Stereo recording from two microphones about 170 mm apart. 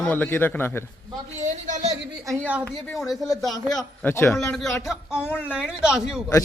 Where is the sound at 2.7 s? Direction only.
5° left (ahead or behind).